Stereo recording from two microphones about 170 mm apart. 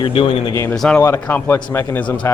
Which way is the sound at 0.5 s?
15° left (ahead or behind).